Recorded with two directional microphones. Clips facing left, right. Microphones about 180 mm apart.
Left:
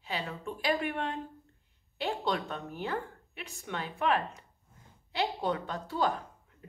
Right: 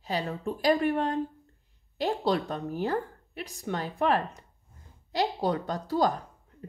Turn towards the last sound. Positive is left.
turn(degrees=-40)  # may be behind; listen again after turning